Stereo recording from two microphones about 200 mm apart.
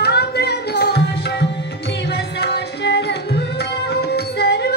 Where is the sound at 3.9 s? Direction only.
55° left (ahead or behind).